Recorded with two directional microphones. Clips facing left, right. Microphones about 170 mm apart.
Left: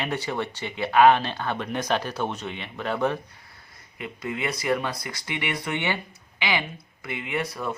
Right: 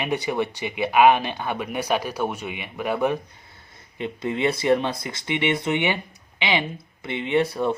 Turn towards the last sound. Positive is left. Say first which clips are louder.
# right 8 dB
turn(degrees=-30)  # may be behind; listen again after turning